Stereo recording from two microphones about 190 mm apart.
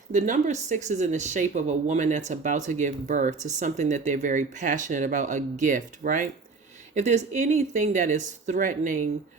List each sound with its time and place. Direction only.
0.1 s speech: 40° right (ahead or behind)